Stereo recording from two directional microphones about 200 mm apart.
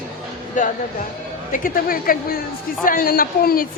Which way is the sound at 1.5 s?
45° left (ahead or behind).